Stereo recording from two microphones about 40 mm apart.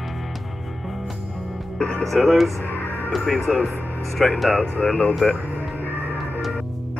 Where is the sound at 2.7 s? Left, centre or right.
Left.